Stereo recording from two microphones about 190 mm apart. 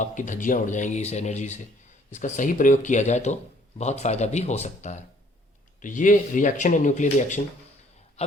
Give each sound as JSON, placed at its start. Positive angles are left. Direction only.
{"t": 0.0, "sound": "speech", "side_deg": 40}